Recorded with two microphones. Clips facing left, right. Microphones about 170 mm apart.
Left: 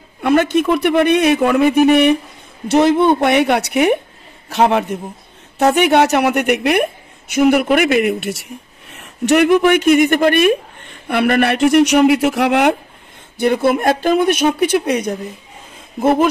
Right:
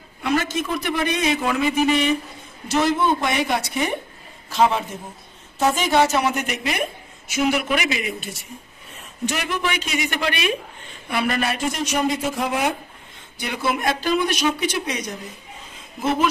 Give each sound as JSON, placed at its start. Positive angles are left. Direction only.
{"t": 0.2, "sound": "a woman's voice", "side_deg": 60}
{"t": 13.4, "sound": "speech", "side_deg": 55}